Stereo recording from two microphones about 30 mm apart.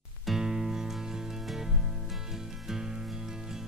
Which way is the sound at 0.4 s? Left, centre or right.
Right.